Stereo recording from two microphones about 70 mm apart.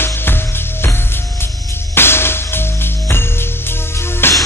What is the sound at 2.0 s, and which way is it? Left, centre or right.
Music, left.